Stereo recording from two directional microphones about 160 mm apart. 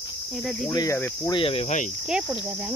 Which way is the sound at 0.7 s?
25° left (ahead or behind).